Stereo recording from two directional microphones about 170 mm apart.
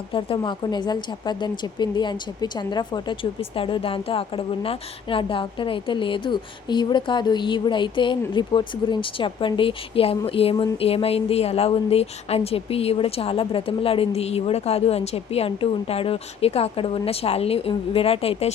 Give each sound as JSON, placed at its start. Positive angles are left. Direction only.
{"t": 0.1, "sound": "a woman's voice", "side_deg": 30}